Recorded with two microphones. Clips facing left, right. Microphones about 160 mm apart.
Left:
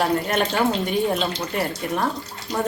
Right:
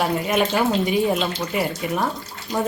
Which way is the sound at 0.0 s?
10° right (ahead or behind).